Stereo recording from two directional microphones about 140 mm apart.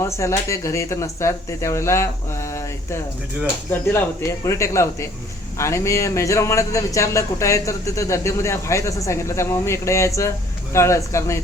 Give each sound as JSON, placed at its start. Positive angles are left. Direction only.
{"t": 0.0, "sound": "a man's voice", "side_deg": 20}